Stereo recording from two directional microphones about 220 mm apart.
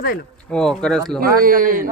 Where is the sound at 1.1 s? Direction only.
40° right (ahead or behind).